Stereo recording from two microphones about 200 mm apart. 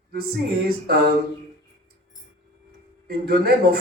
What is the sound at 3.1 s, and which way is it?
Speech, 50° right (ahead or behind).